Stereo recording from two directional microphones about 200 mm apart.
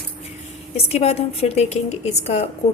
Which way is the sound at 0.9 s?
30° left (ahead or behind).